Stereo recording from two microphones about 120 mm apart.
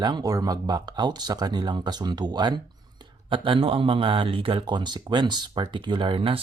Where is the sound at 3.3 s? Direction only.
45° right (ahead or behind).